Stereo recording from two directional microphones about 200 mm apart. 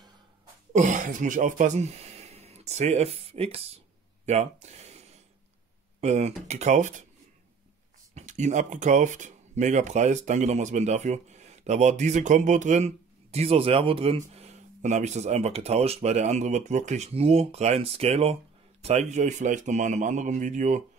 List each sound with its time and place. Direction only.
0.7 s speech: 40° right (ahead or behind)
8.1 s speech: 35° right (ahead or behind)